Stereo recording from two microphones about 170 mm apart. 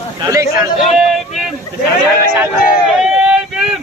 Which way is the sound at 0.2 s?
20° right (ahead or behind).